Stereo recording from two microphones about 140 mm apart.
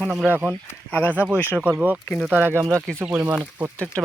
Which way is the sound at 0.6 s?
10° left (ahead or behind).